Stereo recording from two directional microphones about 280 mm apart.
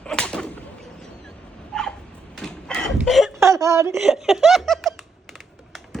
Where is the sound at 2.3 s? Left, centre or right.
Centre.